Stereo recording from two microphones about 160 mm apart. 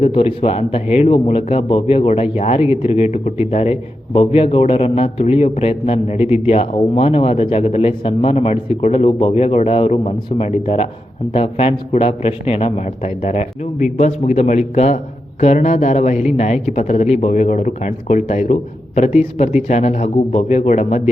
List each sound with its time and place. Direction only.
0.0 s speech: 40° left (ahead or behind)